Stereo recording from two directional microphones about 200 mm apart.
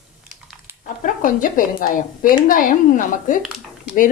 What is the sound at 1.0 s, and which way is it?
Speech, 40° left (ahead or behind).